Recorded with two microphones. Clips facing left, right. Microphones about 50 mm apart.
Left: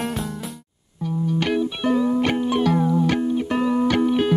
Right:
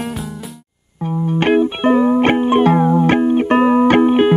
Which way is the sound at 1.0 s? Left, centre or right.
Right.